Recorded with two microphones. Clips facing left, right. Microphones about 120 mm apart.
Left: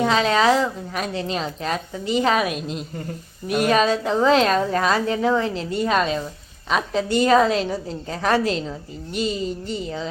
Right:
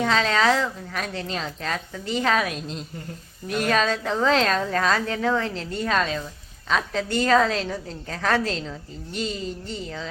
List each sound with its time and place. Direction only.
0.0 s a woman's voice: 15° left (ahead or behind)